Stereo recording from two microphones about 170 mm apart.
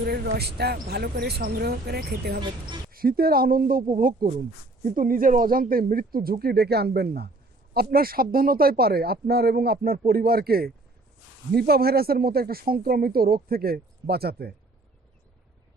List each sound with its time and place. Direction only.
0.0 s speech: 70° right (ahead or behind)
2.4 s speech: 25° right (ahead or behind)
2.9 s speech: 60° right (ahead or behind)